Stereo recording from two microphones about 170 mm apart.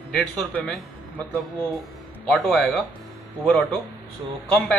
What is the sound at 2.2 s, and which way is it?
Speech, centre (ahead or behind).